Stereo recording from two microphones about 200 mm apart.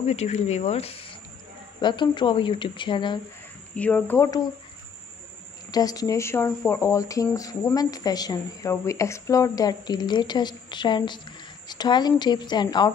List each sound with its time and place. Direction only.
0.0 s speech: 30° left (ahead or behind)
3.7 s speech: 5° left (ahead or behind)
5.7 s speech: 20° left (ahead or behind)